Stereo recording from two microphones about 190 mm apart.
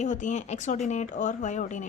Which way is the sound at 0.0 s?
40° left (ahead or behind).